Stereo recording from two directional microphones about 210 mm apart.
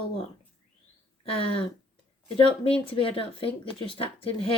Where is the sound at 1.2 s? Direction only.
25° left (ahead or behind).